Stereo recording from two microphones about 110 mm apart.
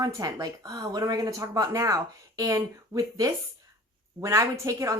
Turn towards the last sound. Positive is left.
turn(degrees=-30)  # may be behind; listen again after turning